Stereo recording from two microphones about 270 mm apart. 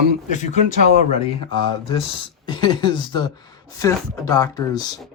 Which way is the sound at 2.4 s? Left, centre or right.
Centre.